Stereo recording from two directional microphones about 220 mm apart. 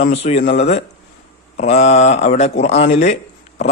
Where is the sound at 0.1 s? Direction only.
30° left (ahead or behind).